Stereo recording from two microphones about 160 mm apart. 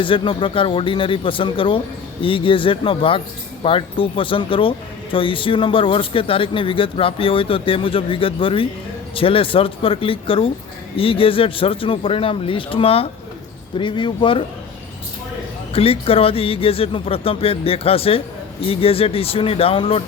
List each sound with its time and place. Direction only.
0.0 s speech: 30° left (ahead or behind)
15.7 s speech: 35° left (ahead or behind)